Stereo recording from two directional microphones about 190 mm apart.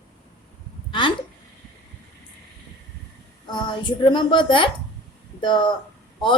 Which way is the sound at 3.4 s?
25° left (ahead or behind).